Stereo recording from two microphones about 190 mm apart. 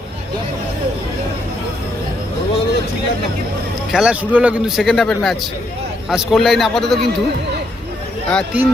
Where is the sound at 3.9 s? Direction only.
5° right (ahead or behind).